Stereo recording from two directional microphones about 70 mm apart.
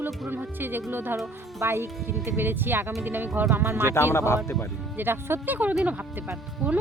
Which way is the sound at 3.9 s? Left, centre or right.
Left.